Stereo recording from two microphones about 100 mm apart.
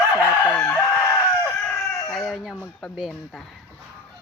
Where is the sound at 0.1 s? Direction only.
20° left (ahead or behind).